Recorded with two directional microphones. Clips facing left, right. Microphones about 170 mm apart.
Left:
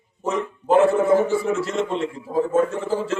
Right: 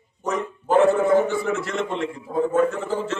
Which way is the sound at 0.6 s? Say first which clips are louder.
Left 1 dB; 30° left (ahead or behind).